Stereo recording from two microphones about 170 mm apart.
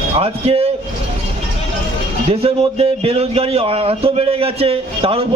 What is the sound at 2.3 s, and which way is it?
Speech, 35° right (ahead or behind).